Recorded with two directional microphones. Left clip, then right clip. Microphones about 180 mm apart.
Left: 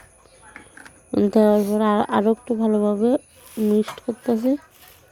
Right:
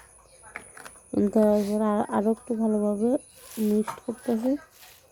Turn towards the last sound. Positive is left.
turn(degrees=10)  # may be behind; listen again after turning